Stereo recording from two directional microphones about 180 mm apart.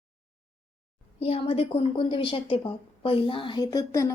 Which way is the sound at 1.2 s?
35° left (ahead or behind).